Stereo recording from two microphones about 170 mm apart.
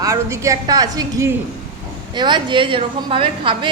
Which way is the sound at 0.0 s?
20° right (ahead or behind).